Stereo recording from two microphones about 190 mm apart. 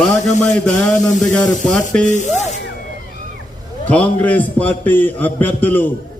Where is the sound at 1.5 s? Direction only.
40° left (ahead or behind).